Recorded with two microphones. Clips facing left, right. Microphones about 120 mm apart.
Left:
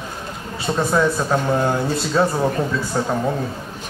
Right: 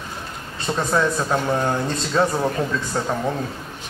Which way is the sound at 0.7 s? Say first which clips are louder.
Left 2 dB; 5° left (ahead or behind).